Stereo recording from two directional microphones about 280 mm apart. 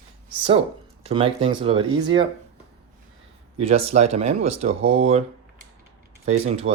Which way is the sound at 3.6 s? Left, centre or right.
Right.